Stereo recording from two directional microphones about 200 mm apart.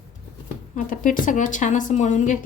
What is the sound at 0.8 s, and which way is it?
A woman's voice, 40° left (ahead or behind).